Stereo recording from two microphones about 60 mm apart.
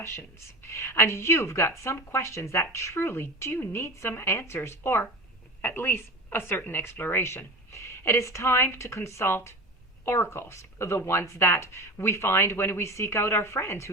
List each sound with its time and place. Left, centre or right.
0.7 s a woman's voice: left